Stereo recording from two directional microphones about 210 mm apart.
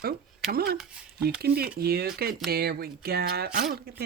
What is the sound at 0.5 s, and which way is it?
Speech, 45° right (ahead or behind).